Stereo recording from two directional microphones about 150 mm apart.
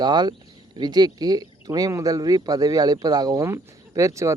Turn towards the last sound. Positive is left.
turn(degrees=-20)  # may be behind; listen again after turning